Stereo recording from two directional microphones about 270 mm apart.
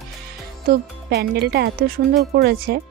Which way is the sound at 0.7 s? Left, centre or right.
Right.